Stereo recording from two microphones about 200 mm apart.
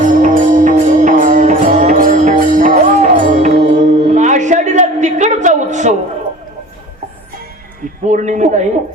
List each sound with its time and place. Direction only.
0.1 s music: 40° right (ahead or behind)
8.0 s speech: 35° right (ahead or behind)